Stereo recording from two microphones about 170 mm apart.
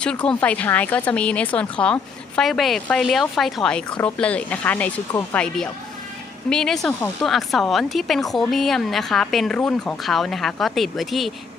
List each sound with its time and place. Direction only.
0.0 s a woman's voice: 5° left (ahead or behind)